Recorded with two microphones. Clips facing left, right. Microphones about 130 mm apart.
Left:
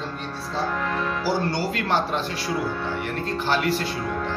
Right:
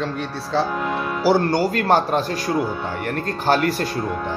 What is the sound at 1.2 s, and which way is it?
Speech, 60° right (ahead or behind).